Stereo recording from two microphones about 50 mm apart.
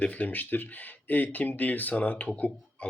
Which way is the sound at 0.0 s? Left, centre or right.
Left.